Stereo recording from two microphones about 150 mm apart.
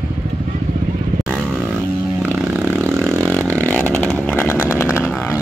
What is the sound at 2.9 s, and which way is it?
Chainsaw, 5° left (ahead or behind).